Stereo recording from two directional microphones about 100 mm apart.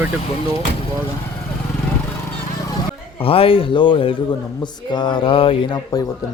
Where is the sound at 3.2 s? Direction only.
70° left (ahead or behind).